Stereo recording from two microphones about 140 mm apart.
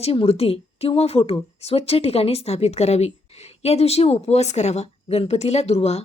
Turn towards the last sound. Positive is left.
turn(degrees=50)  # may be behind; listen again after turning